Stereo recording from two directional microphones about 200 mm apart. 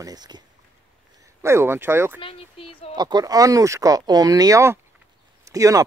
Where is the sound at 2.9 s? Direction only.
20° right (ahead or behind).